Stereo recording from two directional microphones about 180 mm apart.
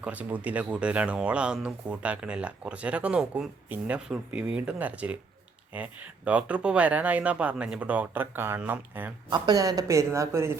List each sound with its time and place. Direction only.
0.0 s speech: 10° right (ahead or behind)
9.3 s speech: 20° right (ahead or behind)